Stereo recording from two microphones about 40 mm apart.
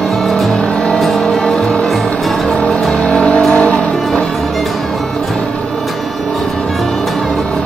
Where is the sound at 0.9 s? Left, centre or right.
Centre.